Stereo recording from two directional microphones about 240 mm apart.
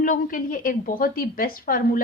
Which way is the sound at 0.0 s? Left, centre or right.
Left.